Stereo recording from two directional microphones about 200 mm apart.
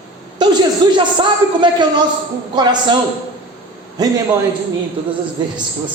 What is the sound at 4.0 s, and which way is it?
Speech, 20° right (ahead or behind).